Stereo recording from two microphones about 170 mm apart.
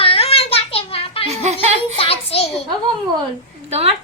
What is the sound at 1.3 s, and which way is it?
Speech, 40° right (ahead or behind).